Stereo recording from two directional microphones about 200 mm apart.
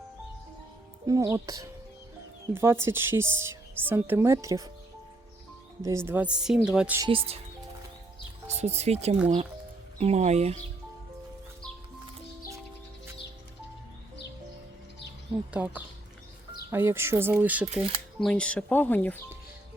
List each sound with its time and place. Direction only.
1.0 s speech: 15° right (ahead or behind)
5.8 s speech: 15° right (ahead or behind)
7.0 s speech: 25° right (ahead or behind)
8.4 s speech: 35° right (ahead or behind)
15.5 s speech: 10° right (ahead or behind)
18.2 s speech: 5° left (ahead or behind)